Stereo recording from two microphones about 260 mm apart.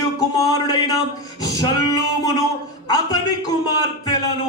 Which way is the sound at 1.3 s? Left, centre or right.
Centre.